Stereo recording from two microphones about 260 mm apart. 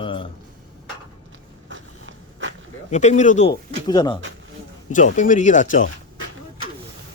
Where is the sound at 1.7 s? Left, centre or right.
Right.